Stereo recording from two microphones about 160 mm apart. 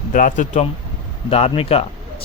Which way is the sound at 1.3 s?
40° left (ahead or behind).